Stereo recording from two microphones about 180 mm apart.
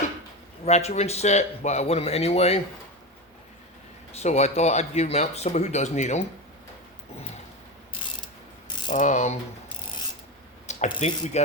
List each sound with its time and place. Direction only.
0.6 s speech: 35° left (ahead or behind)
4.1 s speech: 40° left (ahead or behind)
8.9 s mechanisms: 45° left (ahead or behind)
10.7 s a sound: 40° left (ahead or behind)
10.9 s speech: 40° left (ahead or behind)